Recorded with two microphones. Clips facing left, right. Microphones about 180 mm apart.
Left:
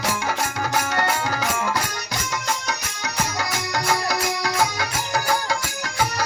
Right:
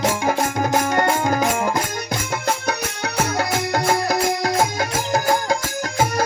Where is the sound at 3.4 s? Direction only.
55° right (ahead or behind).